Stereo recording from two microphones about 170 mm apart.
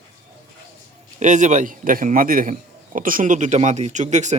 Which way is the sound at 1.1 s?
45° right (ahead or behind).